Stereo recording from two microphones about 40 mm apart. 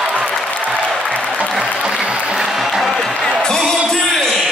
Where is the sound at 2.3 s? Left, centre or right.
Centre.